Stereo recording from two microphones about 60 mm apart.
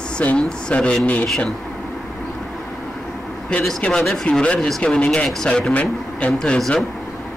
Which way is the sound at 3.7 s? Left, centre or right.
Centre.